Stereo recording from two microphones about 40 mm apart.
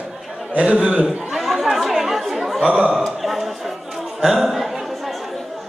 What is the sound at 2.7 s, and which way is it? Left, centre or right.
Speech, centre.